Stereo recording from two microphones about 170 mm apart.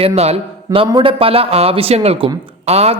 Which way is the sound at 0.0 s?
35° right (ahead or behind).